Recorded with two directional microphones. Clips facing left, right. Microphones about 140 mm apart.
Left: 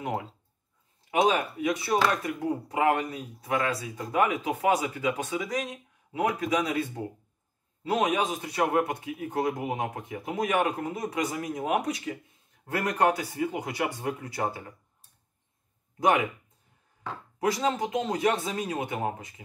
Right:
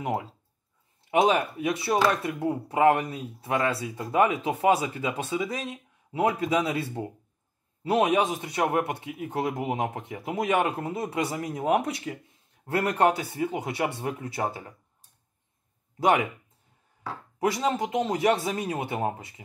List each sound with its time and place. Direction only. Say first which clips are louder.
1.1 s speech: right 2 dB; 25° right (ahead or behind)
17.6 s speech: right 1 dB; 20° right (ahead or behind)